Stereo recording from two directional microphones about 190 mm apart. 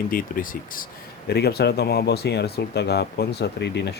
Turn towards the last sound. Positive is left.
turn(degrees=65)  # may be behind; listen again after turning